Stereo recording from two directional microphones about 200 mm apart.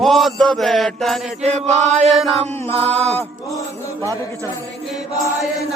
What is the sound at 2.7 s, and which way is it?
Mantra, 30° right (ahead or behind).